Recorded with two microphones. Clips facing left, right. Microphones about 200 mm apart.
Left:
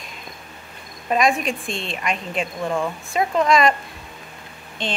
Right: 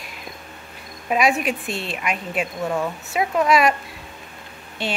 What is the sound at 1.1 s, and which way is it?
A woman's voice, 10° right (ahead or behind).